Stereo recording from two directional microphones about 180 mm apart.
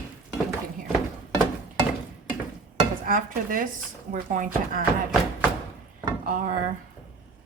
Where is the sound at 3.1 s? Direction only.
50° right (ahead or behind).